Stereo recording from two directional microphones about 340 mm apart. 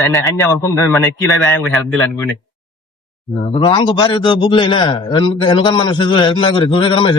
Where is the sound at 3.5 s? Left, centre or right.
Centre.